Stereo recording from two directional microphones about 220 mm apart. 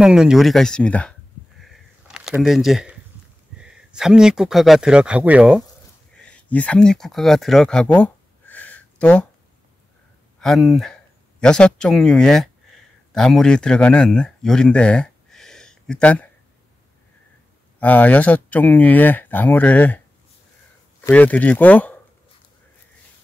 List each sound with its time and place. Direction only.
0.0 s speech: 5° right (ahead or behind)
1.6 s a sound: centre (ahead or behind)
3.5 s speech: 5° right (ahead or behind)
6.1 s a sound: 5° left (ahead or behind)
10.4 s speech: centre (ahead or behind)
17.7 s speech: 5° left (ahead or behind)
21.0 s speech: 5° left (ahead or behind)